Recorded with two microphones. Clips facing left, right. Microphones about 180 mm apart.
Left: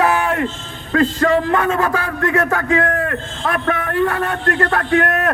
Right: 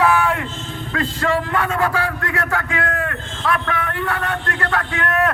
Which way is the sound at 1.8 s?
45° left (ahead or behind).